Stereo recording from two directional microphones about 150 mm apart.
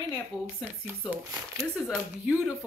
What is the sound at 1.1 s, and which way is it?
Speech, 20° right (ahead or behind).